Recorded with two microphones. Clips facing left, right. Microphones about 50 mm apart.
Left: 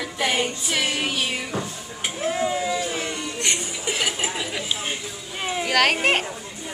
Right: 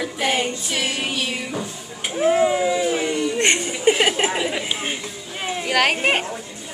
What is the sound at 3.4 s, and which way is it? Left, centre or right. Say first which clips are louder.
Chuckle: right 7 dB; right.